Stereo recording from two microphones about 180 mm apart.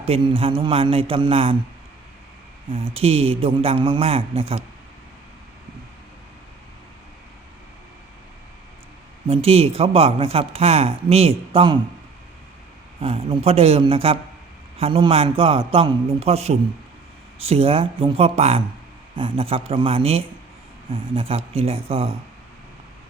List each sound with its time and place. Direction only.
0.0 s speech: 30° right (ahead or behind)
2.6 s speech: 30° right (ahead or behind)
9.2 s speech: 30° right (ahead or behind)
13.0 s speech: 30° right (ahead or behind)